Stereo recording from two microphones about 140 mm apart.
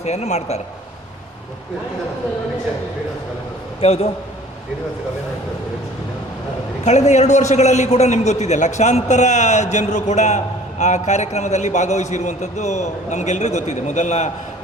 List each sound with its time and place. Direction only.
0.0 s a man's voice: 50° left (ahead or behind)
3.8 s a man's voice: 45° left (ahead or behind)
6.8 s a man's voice: 55° left (ahead or behind)